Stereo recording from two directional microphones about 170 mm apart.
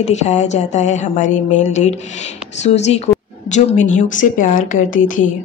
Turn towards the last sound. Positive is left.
turn(degrees=50)  # may be behind; listen again after turning